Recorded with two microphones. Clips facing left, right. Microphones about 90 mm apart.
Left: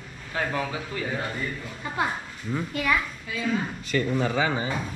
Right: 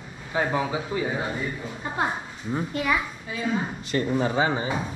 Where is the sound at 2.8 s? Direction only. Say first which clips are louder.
Even; 5° right (ahead or behind).